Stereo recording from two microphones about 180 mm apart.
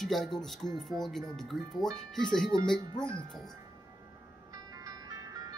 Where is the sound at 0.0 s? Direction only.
Centre (ahead or behind).